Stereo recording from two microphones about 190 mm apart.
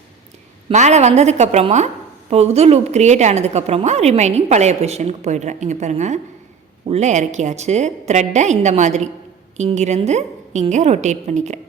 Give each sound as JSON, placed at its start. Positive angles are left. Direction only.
{"t": 0.7, "sound": "a woman's voice", "side_deg": -35}